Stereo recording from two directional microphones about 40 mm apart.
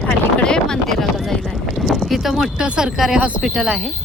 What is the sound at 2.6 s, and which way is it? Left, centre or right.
Speech, right.